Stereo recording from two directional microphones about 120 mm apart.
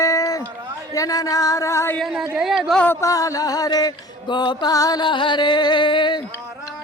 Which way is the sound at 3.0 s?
30° left (ahead or behind).